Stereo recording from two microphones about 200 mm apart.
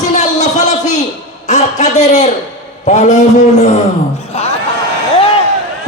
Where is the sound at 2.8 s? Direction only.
35° left (ahead or behind).